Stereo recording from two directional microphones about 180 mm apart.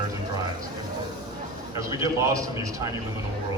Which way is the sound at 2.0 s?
15° right (ahead or behind).